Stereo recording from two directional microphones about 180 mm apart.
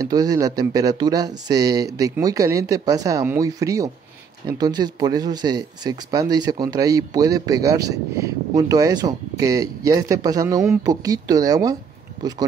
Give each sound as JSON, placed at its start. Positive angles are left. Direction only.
{"t": 0.0, "sound": "speech", "side_deg": -20}